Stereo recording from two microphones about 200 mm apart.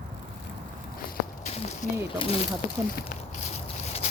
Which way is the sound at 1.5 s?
35° left (ahead or behind).